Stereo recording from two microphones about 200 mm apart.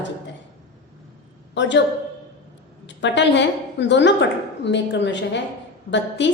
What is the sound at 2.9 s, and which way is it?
A woman's voice, 60° left (ahead or behind).